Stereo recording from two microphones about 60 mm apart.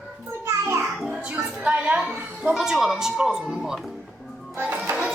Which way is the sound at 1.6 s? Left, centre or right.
Right.